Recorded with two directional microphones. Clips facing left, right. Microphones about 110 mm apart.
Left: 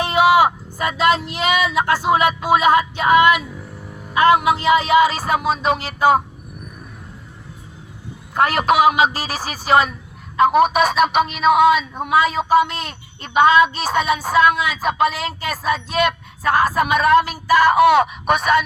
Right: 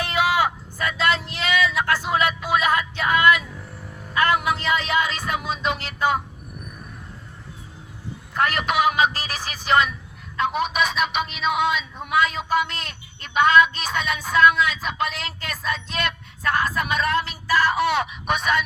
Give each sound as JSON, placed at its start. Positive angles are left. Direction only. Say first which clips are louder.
{"t": 0.0, "sound": "speech", "louder": "left 7 dB", "side_deg": 20}
{"t": 2.5, "sound": "a sound", "louder": "left 9 dB", "side_deg": 20}
{"t": 4.1, "sound": "speech", "louder": "left 7 dB", "side_deg": 25}
{"t": 4.4, "sound": "speech", "louder": "left 7 dB", "side_deg": 10}
{"t": 5.0, "sound": "a woman's voice", "louder": "left 8 dB", "side_deg": 40}
{"t": 8.3, "sound": "a woman's voice", "louder": "left 6 dB", "side_deg": 40}
{"t": 10.3, "sound": "a woman's voice", "louder": "left 9 dB", "side_deg": 50}
{"t": 16.5, "sound": "speech", "louder": "left 7 dB", "side_deg": 45}